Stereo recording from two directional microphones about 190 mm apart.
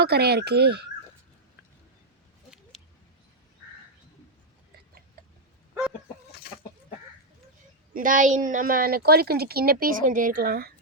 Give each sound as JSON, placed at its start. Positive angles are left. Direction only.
{"t": 0.0, "sound": "speech", "side_deg": -60}
{"t": 7.9, "sound": "speech", "side_deg": -45}